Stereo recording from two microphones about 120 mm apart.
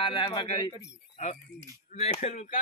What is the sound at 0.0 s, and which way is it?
Speech, 45° left (ahead or behind).